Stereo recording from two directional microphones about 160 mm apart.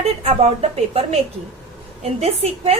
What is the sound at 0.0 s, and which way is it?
A woman's voice, 40° right (ahead or behind).